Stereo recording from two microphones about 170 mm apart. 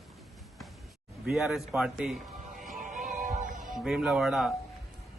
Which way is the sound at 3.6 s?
Centre (ahead or behind).